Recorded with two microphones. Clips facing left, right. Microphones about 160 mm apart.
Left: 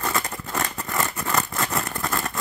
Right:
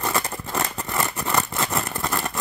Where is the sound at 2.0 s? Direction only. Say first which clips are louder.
Right 1 dB; 25° right (ahead or behind).